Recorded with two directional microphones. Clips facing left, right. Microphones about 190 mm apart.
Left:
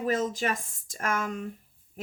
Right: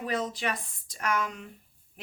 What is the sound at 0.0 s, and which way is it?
Speech, 45° left (ahead or behind).